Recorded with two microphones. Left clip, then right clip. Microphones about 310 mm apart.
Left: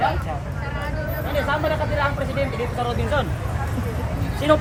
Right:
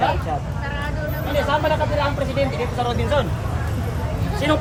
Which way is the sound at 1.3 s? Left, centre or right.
Centre.